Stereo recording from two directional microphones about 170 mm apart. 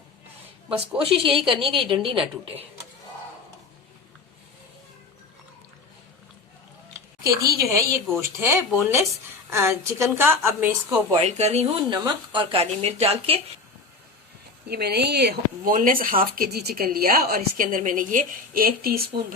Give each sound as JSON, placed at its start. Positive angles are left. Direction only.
{"t": 0.7, "sound": "a woman's voice", "side_deg": -35}
{"t": 7.6, "sound": "a woman's voice", "side_deg": -15}
{"t": 11.1, "sound": "a woman's voice", "side_deg": -40}
{"t": 11.9, "sound": "a woman's voice", "side_deg": -25}
{"t": 14.7, "sound": "speech", "side_deg": -70}
{"t": 15.7, "sound": "a woman's voice", "side_deg": -55}